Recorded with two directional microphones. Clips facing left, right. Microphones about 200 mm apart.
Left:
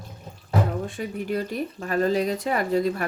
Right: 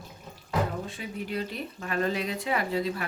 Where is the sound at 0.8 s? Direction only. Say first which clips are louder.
Left 6 dB; 50° left (ahead or behind).